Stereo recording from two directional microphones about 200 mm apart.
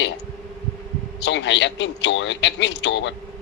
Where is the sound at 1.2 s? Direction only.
65° left (ahead or behind).